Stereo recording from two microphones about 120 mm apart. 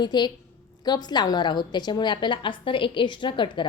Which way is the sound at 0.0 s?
35° left (ahead or behind).